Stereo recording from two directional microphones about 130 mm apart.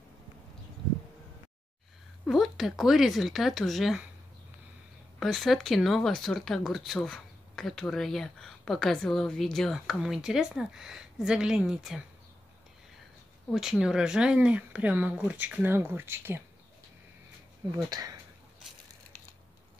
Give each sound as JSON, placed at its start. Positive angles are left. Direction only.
{"t": 2.2, "sound": "speech", "side_deg": 0}
{"t": 5.2, "sound": "speech", "side_deg": 0}
{"t": 13.5, "sound": "speech", "side_deg": -5}
{"t": 17.8, "sound": "speech", "side_deg": -30}